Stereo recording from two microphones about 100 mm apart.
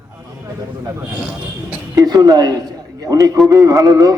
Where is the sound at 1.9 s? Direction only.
40° right (ahead or behind).